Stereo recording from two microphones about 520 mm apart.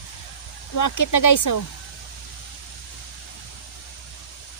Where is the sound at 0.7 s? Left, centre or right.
Left.